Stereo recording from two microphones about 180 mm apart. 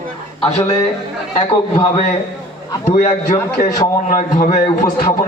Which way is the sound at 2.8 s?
40° left (ahead or behind).